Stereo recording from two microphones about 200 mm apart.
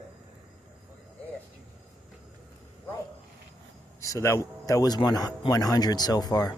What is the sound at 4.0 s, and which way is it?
A man's voice, 15° left (ahead or behind).